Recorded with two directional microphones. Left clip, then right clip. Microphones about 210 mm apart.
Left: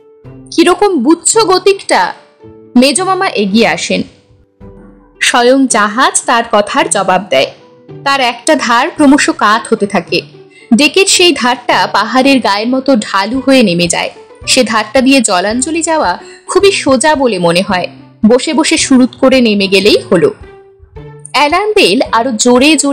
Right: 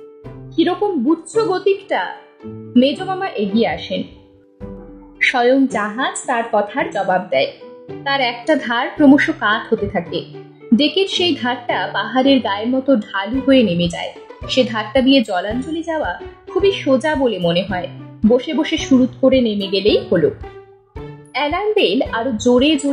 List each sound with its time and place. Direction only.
0.6 s a woman's voice: 30° left (ahead or behind)
5.2 s a woman's voice: 30° left (ahead or behind)
21.3 s a woman's voice: 25° left (ahead or behind)